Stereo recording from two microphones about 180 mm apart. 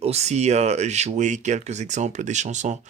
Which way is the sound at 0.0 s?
35° right (ahead or behind).